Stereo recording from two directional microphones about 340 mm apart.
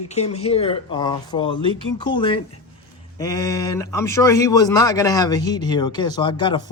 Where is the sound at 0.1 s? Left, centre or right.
Centre.